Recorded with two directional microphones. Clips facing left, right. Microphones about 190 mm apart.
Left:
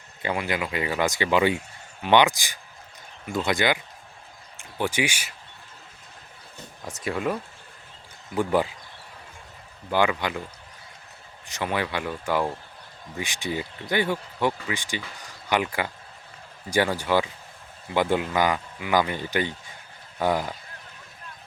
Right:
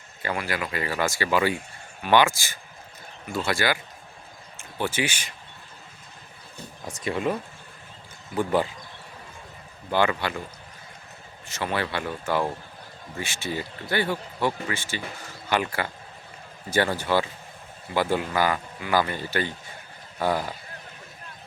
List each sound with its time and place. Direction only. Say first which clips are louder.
0.2 s speech: left 2 dB; 20° left (ahead or behind)
6.8 s speech: right 1 dB; centre (ahead or behind)
9.9 s speech: even; 15° left (ahead or behind)
11.4 s speech: left 1 dB; 15° left (ahead or behind)